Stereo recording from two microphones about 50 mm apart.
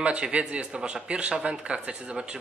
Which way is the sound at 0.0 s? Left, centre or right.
Right.